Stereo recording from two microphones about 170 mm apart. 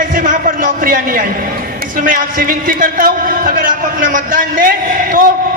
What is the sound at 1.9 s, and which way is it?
A man's voice, 55° right (ahead or behind).